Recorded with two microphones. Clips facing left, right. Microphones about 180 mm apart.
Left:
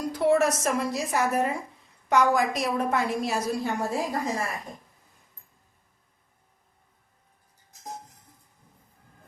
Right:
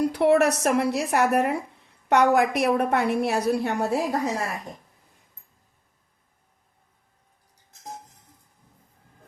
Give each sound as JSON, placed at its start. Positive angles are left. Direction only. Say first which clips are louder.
{"t": 0.0, "sound": "a woman's voice", "louder": "right 3 dB", "side_deg": -65}